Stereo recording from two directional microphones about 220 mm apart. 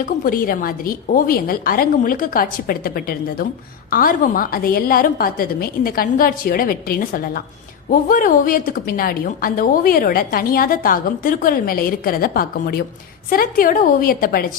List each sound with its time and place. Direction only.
0.0 s a woman's voice: 40° left (ahead or behind)